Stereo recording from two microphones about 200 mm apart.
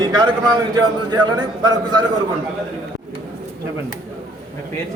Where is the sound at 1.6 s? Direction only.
20° right (ahead or behind).